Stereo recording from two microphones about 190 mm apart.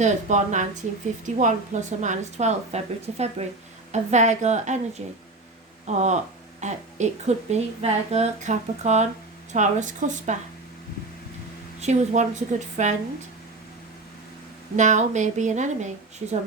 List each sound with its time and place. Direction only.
0.0 s a woman's voice: 40° right (ahead or behind)
11.8 s a woman's voice: 40° right (ahead or behind)
14.8 s a woman's voice: 40° right (ahead or behind)